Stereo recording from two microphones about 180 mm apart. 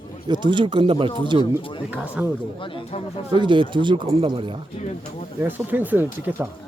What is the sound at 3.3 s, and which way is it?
Speech, 25° right (ahead or behind).